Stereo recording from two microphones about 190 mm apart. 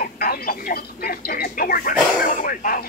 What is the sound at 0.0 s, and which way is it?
Speech, 50° left (ahead or behind).